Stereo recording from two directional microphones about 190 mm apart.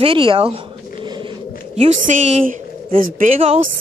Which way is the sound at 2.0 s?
40° right (ahead or behind).